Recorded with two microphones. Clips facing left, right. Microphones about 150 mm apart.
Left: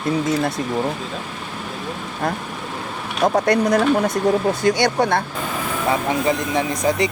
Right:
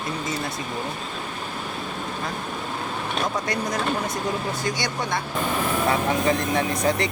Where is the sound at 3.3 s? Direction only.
65° left (ahead or behind).